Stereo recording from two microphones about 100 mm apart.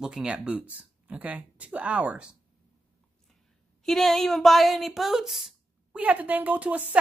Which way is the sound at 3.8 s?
Centre (ahead or behind).